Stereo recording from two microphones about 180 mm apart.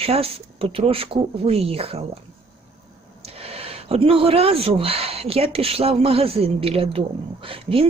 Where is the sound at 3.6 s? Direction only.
35° right (ahead or behind).